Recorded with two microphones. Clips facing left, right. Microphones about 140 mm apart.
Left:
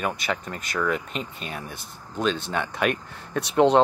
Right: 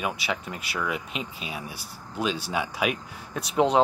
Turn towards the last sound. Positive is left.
turn(degrees=0)  # may be behind; listen again after turning